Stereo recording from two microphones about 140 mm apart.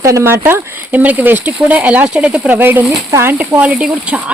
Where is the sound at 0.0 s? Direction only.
20° right (ahead or behind).